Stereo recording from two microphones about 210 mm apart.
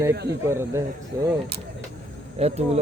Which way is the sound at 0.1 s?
50° right (ahead or behind).